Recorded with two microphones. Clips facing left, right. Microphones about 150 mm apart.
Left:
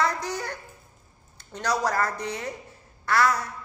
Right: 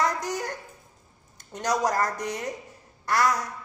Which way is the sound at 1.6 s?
15° right (ahead or behind).